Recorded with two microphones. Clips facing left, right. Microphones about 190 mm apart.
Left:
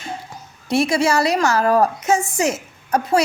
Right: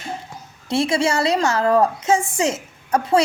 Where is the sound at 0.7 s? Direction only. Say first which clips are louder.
Left 2 dB; 25° right (ahead or behind).